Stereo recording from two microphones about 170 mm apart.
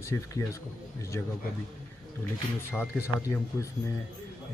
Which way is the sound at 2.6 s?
15° left (ahead or behind).